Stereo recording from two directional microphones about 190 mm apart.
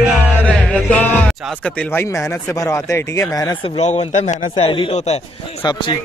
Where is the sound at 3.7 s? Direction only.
35° left (ahead or behind).